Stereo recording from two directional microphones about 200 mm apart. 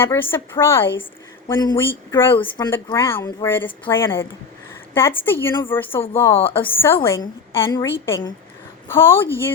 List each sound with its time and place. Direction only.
0.0 s a woman's voice: 10° left (ahead or behind)
2.3 s speech: 25° left (ahead or behind)
2.6 s a woman's voice: 10° left (ahead or behind)
6.3 s speech: 25° left (ahead or behind)
6.8 s a woman's voice: 10° left (ahead or behind)